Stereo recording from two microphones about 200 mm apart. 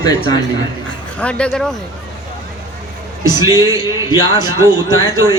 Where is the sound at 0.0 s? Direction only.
20° left (ahead or behind).